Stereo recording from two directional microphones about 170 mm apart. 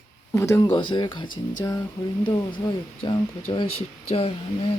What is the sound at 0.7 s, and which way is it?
Speech, 30° left (ahead or behind).